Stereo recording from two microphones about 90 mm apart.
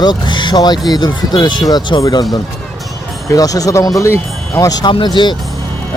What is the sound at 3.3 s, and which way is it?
Speech, 40° left (ahead or behind).